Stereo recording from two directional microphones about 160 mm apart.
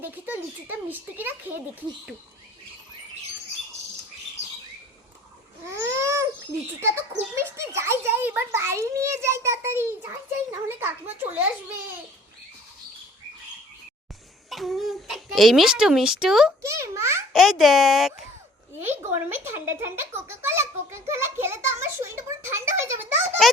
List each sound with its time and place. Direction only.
0.0 s a child's voice: 10° right (ahead or behind)
5.6 s babbling: 15° right (ahead or behind)
6.7 s a child's voice: 15° right (ahead or behind)
7.3 s a sound: 15° right (ahead or behind)
10.8 s a child's voice: 15° right (ahead or behind)
14.5 s a child's voice: centre (ahead or behind)
16.6 s a child's voice: 20° right (ahead or behind)
17.3 s a child's voice: centre (ahead or behind)
18.8 s a child's voice: 15° right (ahead or behind)